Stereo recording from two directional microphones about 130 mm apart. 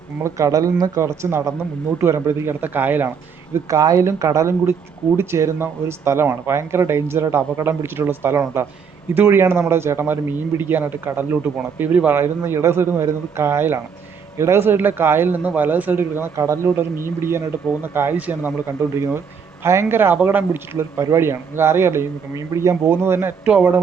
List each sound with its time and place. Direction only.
0.2 s a man's voice: 25° right (ahead or behind)
3.5 s a man's voice: 30° right (ahead or behind); by 23.8 s 10° right (ahead or behind)